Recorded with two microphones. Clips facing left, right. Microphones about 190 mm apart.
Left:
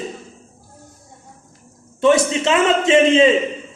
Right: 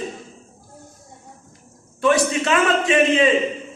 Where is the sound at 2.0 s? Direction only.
25° left (ahead or behind).